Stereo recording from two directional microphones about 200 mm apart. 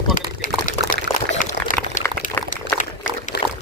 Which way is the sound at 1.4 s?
40° left (ahead or behind).